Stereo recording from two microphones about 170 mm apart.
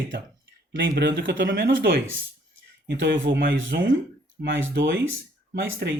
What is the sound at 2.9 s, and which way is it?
Speech, 90° right.